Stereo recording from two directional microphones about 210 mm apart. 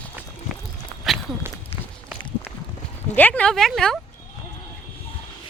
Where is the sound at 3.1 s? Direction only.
5° left (ahead or behind).